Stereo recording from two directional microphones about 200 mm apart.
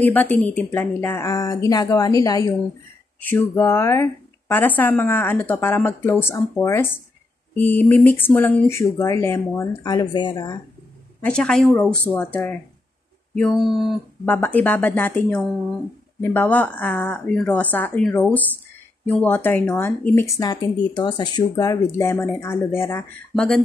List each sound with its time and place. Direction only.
0.0 s speech: 10° left (ahead or behind)
11.1 s speech: 5° left (ahead or behind)